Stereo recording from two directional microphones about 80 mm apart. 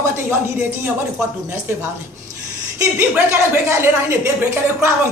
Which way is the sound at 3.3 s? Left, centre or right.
Right.